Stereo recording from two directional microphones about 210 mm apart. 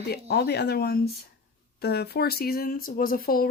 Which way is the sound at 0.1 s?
50° left (ahead or behind).